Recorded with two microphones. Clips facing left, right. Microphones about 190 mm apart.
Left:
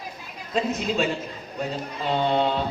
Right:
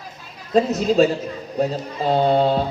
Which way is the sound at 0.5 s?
40° right (ahead or behind).